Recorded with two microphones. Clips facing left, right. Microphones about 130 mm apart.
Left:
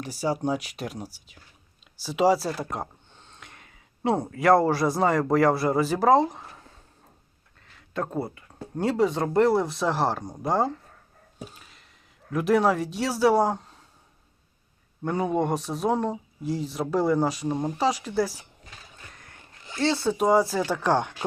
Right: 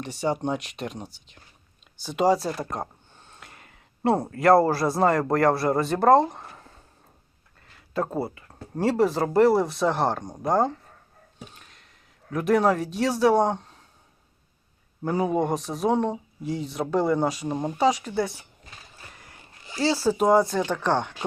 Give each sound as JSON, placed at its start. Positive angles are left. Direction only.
{"t": 0.0, "sound": "speech", "side_deg": 0}
{"t": 15.0, "sound": "speech", "side_deg": 0}
{"t": 19.0, "sound": "a sound", "side_deg": -5}
{"t": 20.7, "sound": "speech", "side_deg": 10}